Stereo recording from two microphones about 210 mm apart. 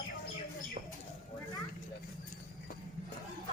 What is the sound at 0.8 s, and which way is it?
Bird, 40° right (ahead or behind).